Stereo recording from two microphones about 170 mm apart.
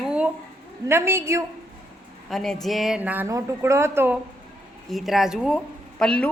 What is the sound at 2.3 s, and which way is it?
A woman's voice, centre (ahead or behind).